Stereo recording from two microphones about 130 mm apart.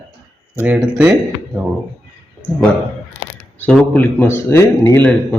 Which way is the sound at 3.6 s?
10° left (ahead or behind).